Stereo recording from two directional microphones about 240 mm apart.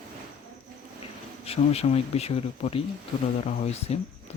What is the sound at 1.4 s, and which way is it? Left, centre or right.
Speech, left.